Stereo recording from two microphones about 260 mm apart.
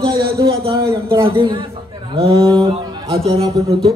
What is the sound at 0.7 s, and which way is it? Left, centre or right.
A man's voice, centre.